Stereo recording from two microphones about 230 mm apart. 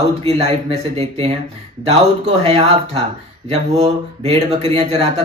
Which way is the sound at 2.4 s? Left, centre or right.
Right.